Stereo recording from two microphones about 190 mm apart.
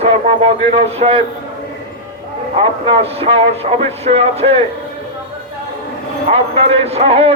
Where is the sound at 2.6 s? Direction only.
30° right (ahead or behind).